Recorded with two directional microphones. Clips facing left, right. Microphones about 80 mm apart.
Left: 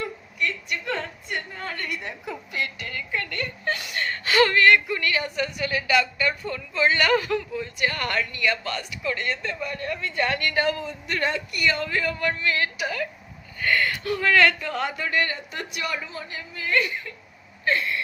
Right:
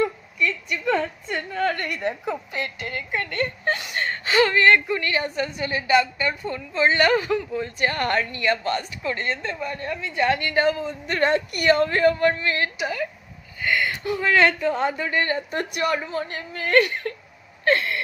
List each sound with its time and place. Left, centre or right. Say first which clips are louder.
1.5 s a woman's voice: right 11 dB; right
1.7 s a woman's voice: right 6 dB; right
2.3 s speech: right 2 dB; right
11.0 s a woman's voice: right 6 dB; right
15.4 s a woman's voice: right 7 dB; right
17.7 s a sound: right 4 dB; right